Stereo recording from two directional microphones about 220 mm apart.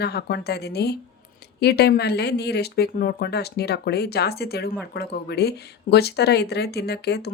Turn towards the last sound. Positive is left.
turn(degrees=50)  # may be behind; listen again after turning